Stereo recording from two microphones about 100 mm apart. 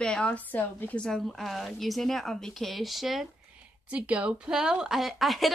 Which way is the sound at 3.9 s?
15° right (ahead or behind).